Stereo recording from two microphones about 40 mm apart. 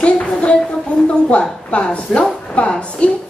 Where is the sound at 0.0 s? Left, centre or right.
Left.